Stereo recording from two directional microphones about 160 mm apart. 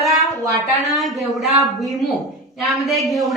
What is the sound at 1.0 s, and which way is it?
Speech, centre (ahead or behind).